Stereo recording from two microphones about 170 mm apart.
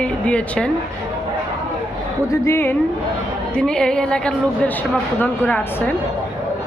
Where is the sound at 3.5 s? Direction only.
5° left (ahead or behind).